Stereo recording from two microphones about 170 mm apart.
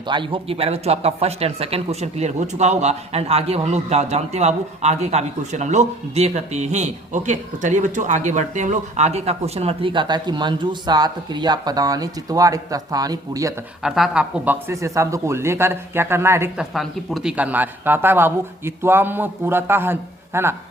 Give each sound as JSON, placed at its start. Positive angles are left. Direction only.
{"t": 0.1, "sound": "speech", "side_deg": -30}
{"t": 13.8, "sound": "speech", "side_deg": -5}
{"t": 16.6, "sound": "speech", "side_deg": 0}